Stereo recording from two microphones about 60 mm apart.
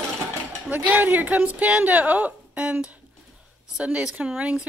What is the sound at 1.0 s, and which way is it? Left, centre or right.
A woman's voice, right.